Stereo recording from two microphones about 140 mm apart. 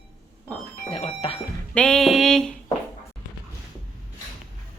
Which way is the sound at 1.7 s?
5° left (ahead or behind).